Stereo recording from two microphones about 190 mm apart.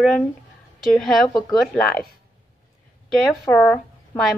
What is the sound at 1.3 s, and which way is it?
Speech, 20° left (ahead or behind).